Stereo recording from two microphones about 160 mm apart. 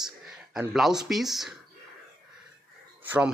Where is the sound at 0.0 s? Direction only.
5° right (ahead or behind).